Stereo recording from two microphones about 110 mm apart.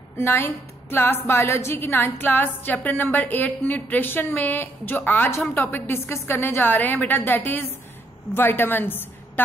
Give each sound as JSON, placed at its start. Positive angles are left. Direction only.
{"t": 0.2, "sound": "a woman's voice", "side_deg": 20}